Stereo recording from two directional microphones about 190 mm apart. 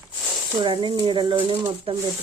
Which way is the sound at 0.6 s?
25° right (ahead or behind).